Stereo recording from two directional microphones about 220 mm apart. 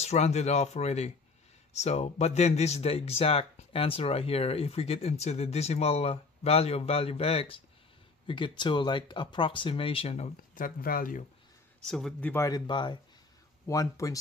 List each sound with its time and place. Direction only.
0.0 s speech: 30° left (ahead or behind)
11.9 s speech: 5° left (ahead or behind)